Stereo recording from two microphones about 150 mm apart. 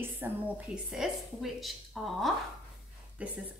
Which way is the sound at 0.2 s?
15° right (ahead or behind).